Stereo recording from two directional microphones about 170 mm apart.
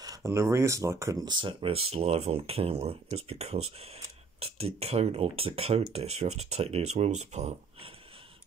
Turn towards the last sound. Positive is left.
turn(degrees=-40)  # may be behind; listen again after turning